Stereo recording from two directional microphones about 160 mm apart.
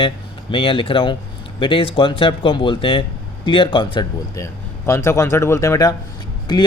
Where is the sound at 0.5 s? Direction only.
35° left (ahead or behind).